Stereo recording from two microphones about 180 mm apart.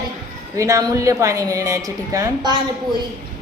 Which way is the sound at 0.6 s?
15° right (ahead or behind).